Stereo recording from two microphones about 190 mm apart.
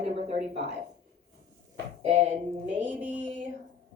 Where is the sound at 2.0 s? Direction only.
35° right (ahead or behind).